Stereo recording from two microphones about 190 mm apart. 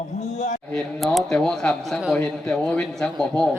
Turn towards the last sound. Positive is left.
turn(degrees=5)  # may be behind; listen again after turning